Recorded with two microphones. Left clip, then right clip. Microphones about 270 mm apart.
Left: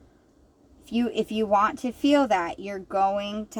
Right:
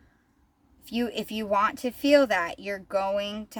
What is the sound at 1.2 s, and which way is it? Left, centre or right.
Speech, right.